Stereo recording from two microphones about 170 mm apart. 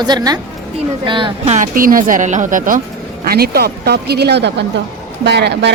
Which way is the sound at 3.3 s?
65° right (ahead or behind).